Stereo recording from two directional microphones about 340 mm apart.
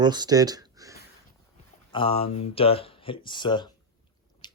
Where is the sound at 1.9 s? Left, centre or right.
Centre.